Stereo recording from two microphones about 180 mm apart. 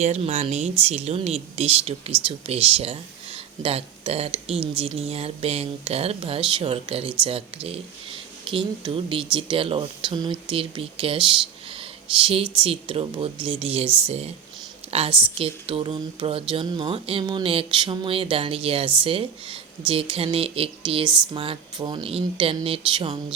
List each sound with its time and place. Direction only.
0.0 s speech: 35° right (ahead or behind)